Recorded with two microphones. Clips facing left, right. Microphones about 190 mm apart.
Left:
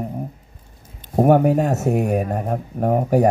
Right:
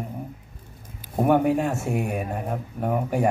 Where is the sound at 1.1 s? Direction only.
40° left (ahead or behind).